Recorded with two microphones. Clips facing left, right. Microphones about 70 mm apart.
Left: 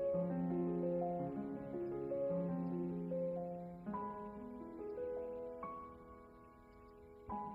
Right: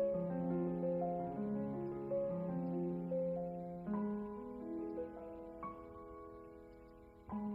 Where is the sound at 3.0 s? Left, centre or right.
Right.